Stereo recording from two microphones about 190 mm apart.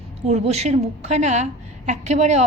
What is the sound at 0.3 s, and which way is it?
A woman's voice, 35° right (ahead or behind).